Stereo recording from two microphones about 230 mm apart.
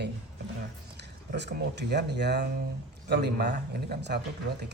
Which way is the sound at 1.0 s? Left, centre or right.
Right.